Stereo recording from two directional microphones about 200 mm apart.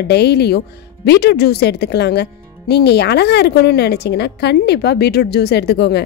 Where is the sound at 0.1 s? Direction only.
55° left (ahead or behind).